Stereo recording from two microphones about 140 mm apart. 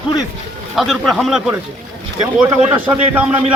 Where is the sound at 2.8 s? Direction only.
10° right (ahead or behind).